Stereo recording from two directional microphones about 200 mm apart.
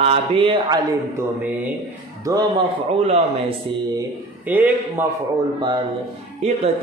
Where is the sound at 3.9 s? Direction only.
10° right (ahead or behind).